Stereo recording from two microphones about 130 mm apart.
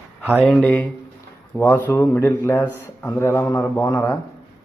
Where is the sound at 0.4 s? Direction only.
10° left (ahead or behind).